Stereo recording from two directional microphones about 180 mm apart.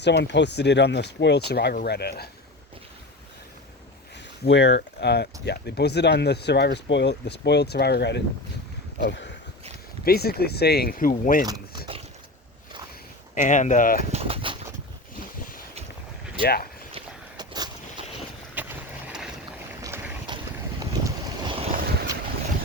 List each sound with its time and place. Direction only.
0.0 s speech: 70° left (ahead or behind)
4.4 s speech: 80° left
10.0 s speech: 60° left (ahead or behind)
11.4 s a sound: 20° right (ahead or behind)
13.3 s speech: 45° left (ahead or behind)
14.1 s bird: 35° right (ahead or behind)
16.4 s speech: 60° left (ahead or behind)
17.3 s boat: 25° right (ahead or behind)
18.5 s vehicle: 10° right (ahead or behind)
19.8 s vehicle: 20° right (ahead or behind)